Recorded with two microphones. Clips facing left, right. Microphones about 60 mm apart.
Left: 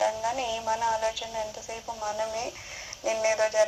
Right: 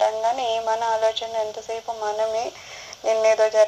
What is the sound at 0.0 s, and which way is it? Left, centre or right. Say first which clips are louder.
Speech: right 6 dB; right.